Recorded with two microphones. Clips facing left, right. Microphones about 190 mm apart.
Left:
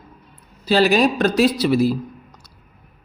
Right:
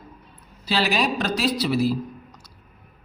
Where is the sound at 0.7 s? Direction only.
45° left (ahead or behind).